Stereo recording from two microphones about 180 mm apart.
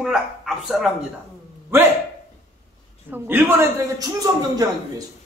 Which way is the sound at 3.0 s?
10° right (ahead or behind).